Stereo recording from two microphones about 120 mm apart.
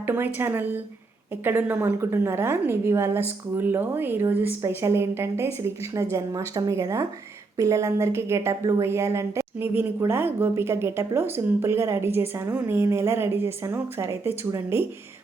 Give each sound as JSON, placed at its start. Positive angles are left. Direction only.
{"t": 0.0, "sound": "a woman's voice", "side_deg": -20}